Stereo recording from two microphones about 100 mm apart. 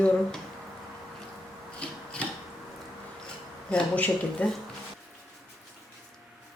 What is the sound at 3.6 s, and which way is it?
Speech, 10° left (ahead or behind).